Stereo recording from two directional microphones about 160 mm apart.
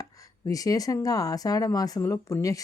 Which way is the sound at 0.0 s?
20° left (ahead or behind).